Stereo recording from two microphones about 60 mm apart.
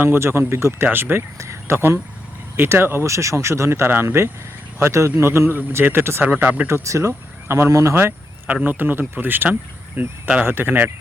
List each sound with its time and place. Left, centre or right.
0.0 s speech: right
1.4 s speech: right
3.1 s speech: right
6.4 s speech: right
6.8 s speech: right
7.4 s speech: right
8.6 s speech: right
10.4 s speech: right